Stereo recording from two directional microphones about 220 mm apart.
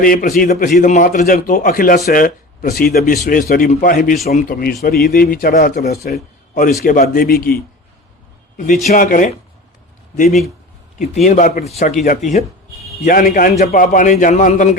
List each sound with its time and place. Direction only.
0.0 s a man's voice: 40° left (ahead or behind)
11.3 s a man's voice: 35° left (ahead or behind)